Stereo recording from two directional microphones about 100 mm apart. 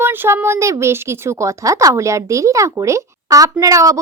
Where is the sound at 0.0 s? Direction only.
20° right (ahead or behind).